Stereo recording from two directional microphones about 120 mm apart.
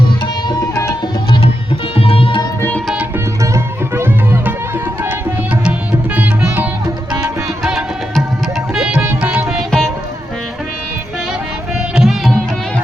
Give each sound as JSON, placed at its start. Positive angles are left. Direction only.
{"t": 0.4, "sound": "music", "side_deg": 30}
{"t": 2.0, "sound": "tabla", "side_deg": 50}
{"t": 2.6, "sound": "music", "side_deg": 15}
{"t": 2.8, "sound": "music", "side_deg": -5}
{"t": 3.4, "sound": "music", "side_deg": -20}
{"t": 7.6, "sound": "music", "side_deg": 0}
{"t": 11.9, "sound": "sitar", "side_deg": 0}